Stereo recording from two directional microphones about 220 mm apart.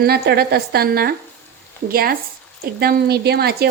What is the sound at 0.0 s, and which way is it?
Speech, 45° right (ahead or behind).